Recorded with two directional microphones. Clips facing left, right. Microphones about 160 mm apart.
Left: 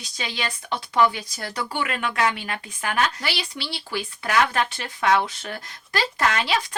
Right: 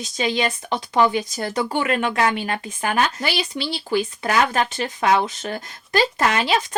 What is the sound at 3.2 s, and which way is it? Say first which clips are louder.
Speech: right 6 dB; 20° right (ahead or behind).